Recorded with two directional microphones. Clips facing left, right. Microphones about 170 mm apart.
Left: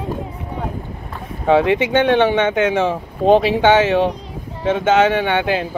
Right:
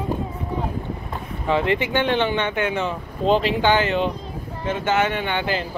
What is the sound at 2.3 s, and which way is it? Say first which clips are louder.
Speech: left 7 dB; 90° left.